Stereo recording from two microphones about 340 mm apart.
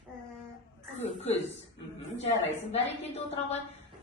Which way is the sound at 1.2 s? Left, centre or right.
Centre.